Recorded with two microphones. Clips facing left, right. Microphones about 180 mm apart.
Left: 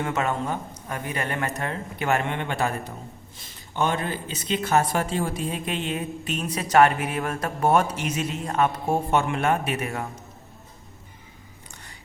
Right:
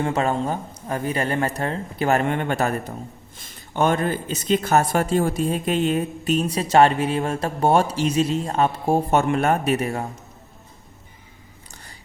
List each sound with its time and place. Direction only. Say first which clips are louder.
0.0 s speech: right 4 dB; 35° right (ahead or behind)
3.8 s speech: right 5 dB; 45° right (ahead or behind)